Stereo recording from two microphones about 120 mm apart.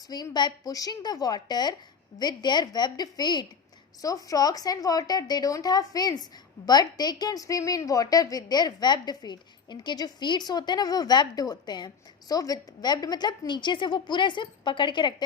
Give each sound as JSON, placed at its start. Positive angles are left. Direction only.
{"t": 0.1, "sound": "a woman's voice", "side_deg": 35}